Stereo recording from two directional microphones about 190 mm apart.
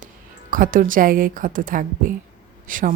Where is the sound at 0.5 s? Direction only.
45° right (ahead or behind).